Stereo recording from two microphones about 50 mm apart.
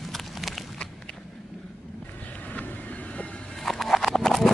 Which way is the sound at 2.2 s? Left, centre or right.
Left.